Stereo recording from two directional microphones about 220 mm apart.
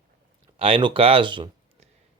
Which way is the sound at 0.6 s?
20° right (ahead or behind).